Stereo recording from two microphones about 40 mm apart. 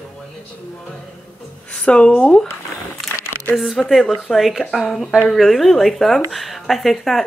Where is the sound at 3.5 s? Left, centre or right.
Centre.